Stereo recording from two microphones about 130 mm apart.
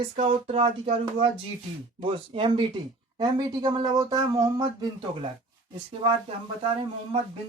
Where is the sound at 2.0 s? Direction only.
40° right (ahead or behind).